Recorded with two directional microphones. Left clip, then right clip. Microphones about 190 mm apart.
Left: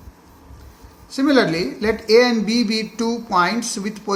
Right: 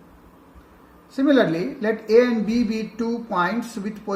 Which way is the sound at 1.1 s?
30° left (ahead or behind).